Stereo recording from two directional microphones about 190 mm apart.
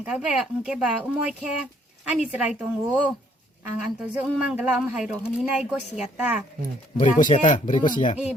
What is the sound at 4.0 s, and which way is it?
A woman's voice, 5° right (ahead or behind).